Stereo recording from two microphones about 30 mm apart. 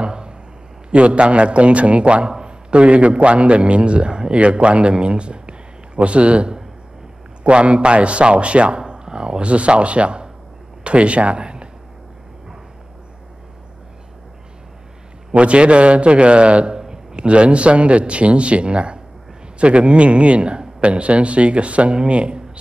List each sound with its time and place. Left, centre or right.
0.0 s a sound: right
0.8 s a man's voice: right
9.4 s speech: right
15.3 s a man's voice: right
16.7 s a man's voice: right